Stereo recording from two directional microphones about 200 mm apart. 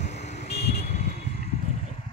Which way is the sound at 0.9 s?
35° left (ahead or behind).